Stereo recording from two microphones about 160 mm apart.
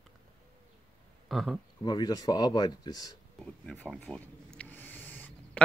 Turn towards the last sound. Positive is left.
turn(degrees=10)  # may be behind; listen again after turning